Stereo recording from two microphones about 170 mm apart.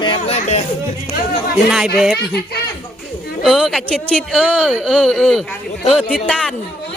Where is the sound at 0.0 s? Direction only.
30° left (ahead or behind).